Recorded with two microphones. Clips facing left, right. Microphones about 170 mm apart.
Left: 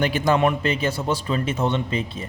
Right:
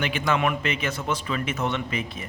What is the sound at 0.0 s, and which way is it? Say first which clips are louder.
A man's voice: left 5 dB; 40° left (ahead or behind).